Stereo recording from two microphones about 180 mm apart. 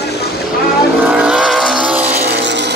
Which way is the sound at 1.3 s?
Centre (ahead or behind).